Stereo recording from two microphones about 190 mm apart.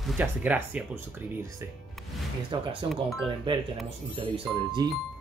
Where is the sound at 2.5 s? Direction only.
25° right (ahead or behind).